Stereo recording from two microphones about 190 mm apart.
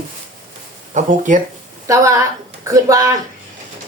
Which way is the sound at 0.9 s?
40° right (ahead or behind).